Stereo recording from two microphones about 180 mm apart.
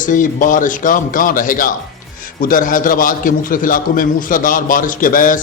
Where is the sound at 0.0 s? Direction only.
45° left (ahead or behind).